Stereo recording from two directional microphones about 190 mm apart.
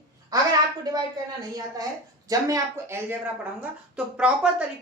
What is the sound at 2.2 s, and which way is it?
Speech, 15° right (ahead or behind).